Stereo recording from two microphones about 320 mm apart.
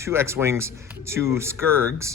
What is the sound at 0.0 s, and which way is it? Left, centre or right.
Speech, centre.